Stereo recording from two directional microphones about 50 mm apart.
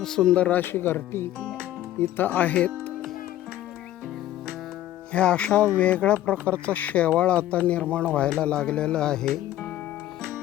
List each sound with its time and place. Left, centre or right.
0.0 s speech: centre
0.3 s speech: left
0.6 s speech: left
5.1 s speech: left